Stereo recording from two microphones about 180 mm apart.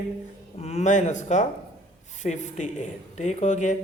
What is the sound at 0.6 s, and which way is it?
Speech, 35° left (ahead or behind).